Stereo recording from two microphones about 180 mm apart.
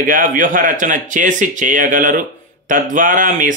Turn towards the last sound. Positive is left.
turn(degrees=-45)  # may be behind; listen again after turning